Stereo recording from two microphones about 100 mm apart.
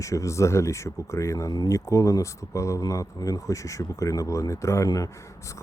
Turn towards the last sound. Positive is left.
turn(degrees=35)  # may be behind; listen again after turning